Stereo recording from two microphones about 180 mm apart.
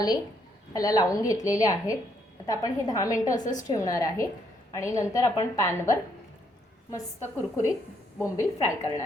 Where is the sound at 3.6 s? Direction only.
20° left (ahead or behind).